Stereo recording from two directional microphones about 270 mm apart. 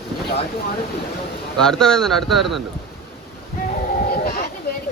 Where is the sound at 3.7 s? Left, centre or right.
Left.